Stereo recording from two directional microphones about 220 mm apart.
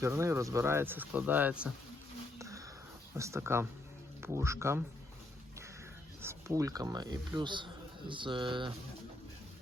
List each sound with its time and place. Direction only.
0.0 s speech: 10° right (ahead or behind)
2.4 s a sound: 15° right (ahead or behind)
3.2 s speech: 15° right (ahead or behind)
6.2 s speech: 15° right (ahead or behind)